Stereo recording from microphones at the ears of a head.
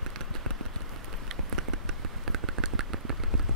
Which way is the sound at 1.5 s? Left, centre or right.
Right.